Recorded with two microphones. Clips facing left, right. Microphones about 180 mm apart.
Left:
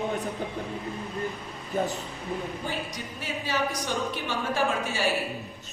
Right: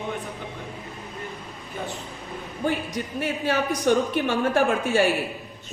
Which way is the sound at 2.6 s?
60° right (ahead or behind).